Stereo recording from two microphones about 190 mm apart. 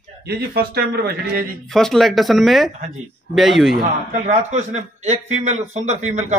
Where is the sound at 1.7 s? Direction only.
Centre (ahead or behind).